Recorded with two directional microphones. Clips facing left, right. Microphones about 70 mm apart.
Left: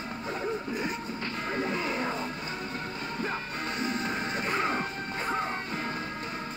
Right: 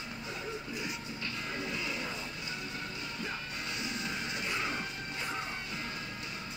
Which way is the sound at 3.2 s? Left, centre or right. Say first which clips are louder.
Left 7 dB; left.